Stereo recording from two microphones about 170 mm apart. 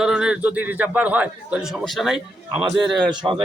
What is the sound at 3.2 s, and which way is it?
Speech, 20° right (ahead or behind).